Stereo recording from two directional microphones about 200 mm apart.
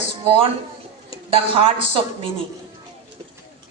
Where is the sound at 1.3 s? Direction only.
25° right (ahead or behind).